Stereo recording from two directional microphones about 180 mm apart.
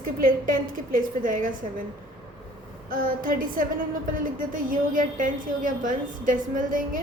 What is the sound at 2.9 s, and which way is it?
A woman's voice, 50° right (ahead or behind).